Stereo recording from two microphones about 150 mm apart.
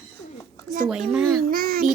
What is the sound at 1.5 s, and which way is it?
Child singing, 70° right (ahead or behind).